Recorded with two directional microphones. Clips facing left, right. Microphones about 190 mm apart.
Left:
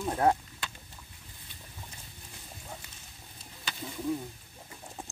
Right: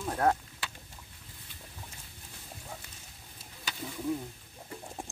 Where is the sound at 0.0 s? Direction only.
10° left (ahead or behind).